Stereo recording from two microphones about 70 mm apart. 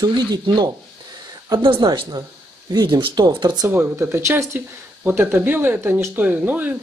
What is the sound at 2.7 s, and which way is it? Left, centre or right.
Speech, right.